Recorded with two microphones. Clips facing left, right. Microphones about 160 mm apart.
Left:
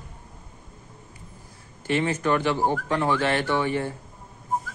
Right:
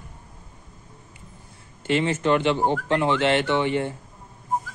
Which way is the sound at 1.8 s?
25° right (ahead or behind).